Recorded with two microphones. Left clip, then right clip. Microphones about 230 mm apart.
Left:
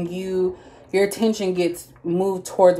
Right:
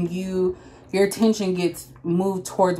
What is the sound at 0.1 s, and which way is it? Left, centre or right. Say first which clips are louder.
Speech: left 1 dB; centre.